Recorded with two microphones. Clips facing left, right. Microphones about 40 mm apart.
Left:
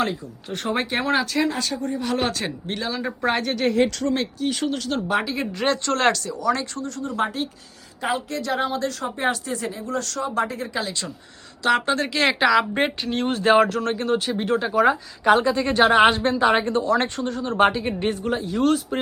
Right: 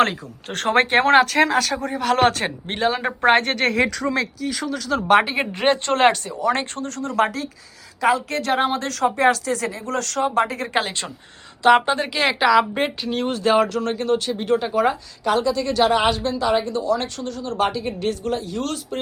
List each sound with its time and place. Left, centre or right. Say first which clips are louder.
0.0 s speech: right 5 dB; right
1.5 s speech: right 4 dB; right
5.0 s speech: right 10 dB; right
5.3 s speech: right 3 dB; right
8.4 s speech: right 3 dB; right
9.8 s speech: right 5 dB; right
11.9 s speech: even; centre
15.2 s a woman's voice: left 2 dB; left
18.3 s speech: left 4 dB; centre